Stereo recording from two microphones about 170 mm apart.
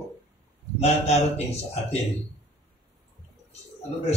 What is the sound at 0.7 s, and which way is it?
A man's voice, 40° left (ahead or behind).